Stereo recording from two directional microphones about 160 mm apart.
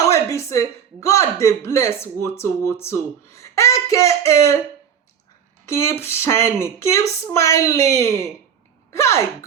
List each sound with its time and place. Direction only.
0.0 s a sound: 20° left (ahead or behind)
1.4 s speech: 20° left (ahead or behind)
5.6 s speech: 15° left (ahead or behind)